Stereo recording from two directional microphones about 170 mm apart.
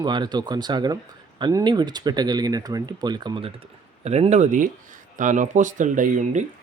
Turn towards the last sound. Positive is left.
turn(degrees=-45)  # may be behind; listen again after turning